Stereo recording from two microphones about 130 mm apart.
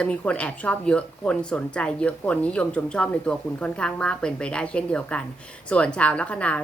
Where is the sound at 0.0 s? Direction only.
10° left (ahead or behind).